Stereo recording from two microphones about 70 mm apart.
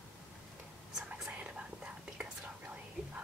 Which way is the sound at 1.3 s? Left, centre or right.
Centre.